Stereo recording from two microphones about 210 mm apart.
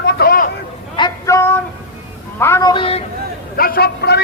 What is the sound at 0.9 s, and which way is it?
Female singing, 20° left (ahead or behind).